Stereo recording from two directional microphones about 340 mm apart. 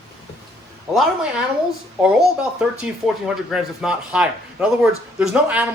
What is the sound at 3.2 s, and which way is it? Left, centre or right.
Speech, centre.